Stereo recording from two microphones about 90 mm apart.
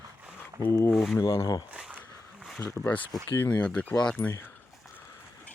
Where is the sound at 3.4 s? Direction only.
15° left (ahead or behind).